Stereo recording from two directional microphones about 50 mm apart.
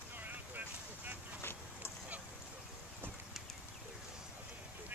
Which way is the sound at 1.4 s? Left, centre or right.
Left.